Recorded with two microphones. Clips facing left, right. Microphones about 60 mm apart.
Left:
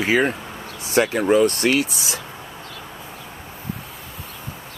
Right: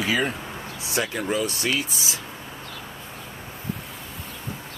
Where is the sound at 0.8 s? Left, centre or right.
Left.